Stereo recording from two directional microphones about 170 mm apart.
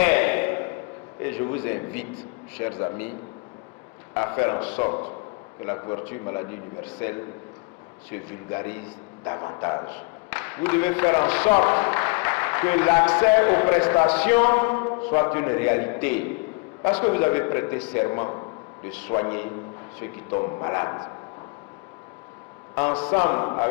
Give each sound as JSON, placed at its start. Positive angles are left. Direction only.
{"t": 0.0, "sound": "a sound", "side_deg": 10}
{"t": 2.6, "sound": "a man's voice", "side_deg": 15}
{"t": 4.1, "sound": "a man's voice", "side_deg": 10}
{"t": 22.7, "sound": "a man's voice", "side_deg": 10}